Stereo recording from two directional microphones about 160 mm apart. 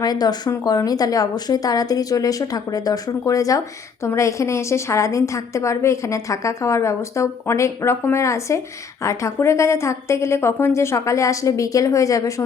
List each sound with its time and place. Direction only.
0.0 s a woman's voice: 25° left (ahead or behind)